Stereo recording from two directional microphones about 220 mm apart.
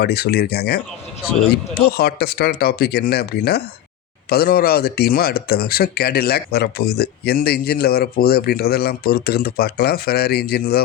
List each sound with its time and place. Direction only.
0.0 s speech: 45° left (ahead or behind)